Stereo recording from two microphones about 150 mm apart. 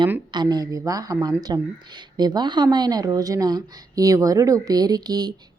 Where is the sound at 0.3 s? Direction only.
25° right (ahead or behind).